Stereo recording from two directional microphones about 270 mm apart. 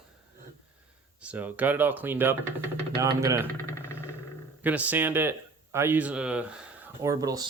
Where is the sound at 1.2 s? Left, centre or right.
Centre.